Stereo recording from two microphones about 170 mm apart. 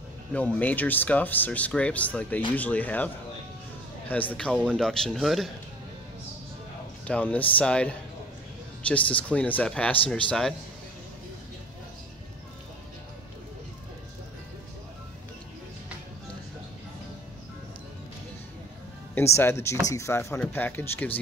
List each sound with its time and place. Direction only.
0.3 s speech: 10° left (ahead or behind)
4.1 s a man's voice: 10° left (ahead or behind)
7.1 s speech: 10° left (ahead or behind)
19.3 s speech: 15° left (ahead or behind)